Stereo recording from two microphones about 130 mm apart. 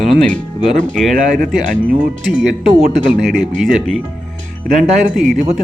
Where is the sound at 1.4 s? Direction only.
90° right.